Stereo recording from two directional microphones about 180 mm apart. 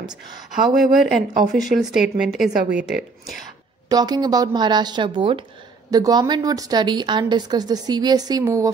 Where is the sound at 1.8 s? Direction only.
Centre (ahead or behind).